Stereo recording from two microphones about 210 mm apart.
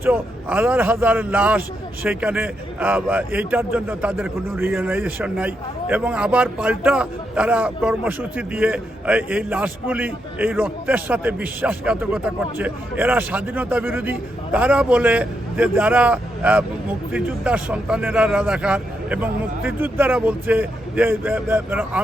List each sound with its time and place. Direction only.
0.0 s a man's voice: 10° right (ahead or behind)